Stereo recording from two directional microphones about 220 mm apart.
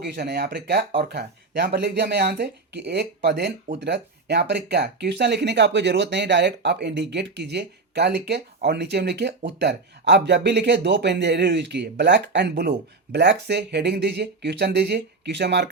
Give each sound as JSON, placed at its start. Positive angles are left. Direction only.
{"t": 0.0, "sound": "speech", "side_deg": -45}